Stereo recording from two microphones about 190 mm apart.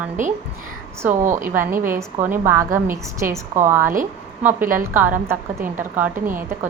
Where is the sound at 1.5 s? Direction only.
10° right (ahead or behind).